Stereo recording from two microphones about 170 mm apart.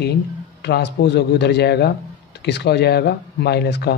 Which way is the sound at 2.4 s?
85° left.